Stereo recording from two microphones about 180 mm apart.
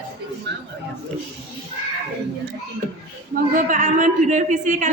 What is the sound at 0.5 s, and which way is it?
Speech, 75° right (ahead or behind).